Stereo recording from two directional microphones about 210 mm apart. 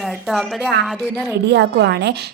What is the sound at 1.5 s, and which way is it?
Speech, 55° right (ahead or behind).